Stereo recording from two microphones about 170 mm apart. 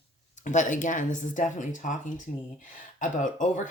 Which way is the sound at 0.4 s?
45° left (ahead or behind).